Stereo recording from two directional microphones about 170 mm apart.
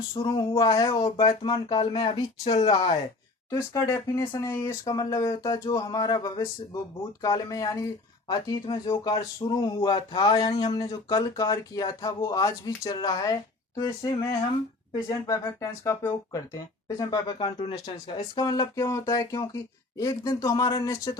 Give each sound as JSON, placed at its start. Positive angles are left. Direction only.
{"t": 0.1, "sound": "speech", "side_deg": 25}
{"t": 3.5, "sound": "speech", "side_deg": 20}